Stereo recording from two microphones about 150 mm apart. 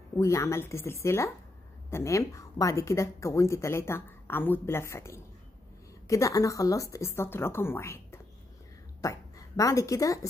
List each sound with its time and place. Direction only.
0.2 s a woman's voice: 20° left (ahead or behind)